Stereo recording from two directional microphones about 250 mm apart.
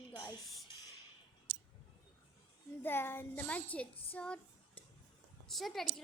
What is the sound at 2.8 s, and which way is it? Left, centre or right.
A woman's voice, centre.